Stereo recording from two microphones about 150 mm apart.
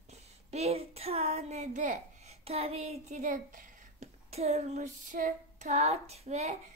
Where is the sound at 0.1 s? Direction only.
45° right (ahead or behind); by 4.1 s 60° right (ahead or behind).